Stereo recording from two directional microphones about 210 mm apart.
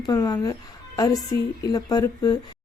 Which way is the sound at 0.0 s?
15° left (ahead or behind).